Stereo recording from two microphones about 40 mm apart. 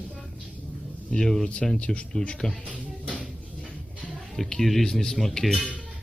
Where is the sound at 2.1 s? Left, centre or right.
Centre.